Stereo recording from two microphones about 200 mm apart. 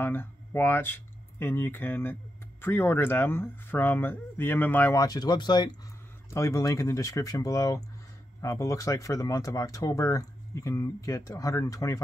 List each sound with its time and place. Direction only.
0.0 s speech: 10° left (ahead or behind)